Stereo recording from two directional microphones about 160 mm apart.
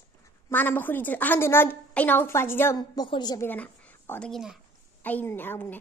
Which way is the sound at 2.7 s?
25° left (ahead or behind).